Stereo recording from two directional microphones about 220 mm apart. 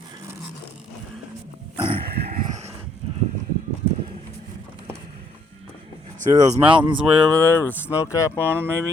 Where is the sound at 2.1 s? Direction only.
45° right (ahead or behind).